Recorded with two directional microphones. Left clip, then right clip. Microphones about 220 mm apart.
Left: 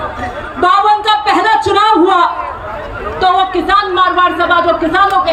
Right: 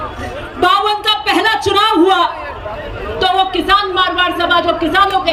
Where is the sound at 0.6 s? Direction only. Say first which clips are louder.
Left 3 dB; 50° right (ahead or behind).